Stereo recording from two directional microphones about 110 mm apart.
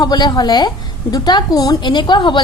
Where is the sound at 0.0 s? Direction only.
40° left (ahead or behind).